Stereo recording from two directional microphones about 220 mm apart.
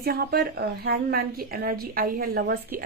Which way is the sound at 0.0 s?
45° right (ahead or behind).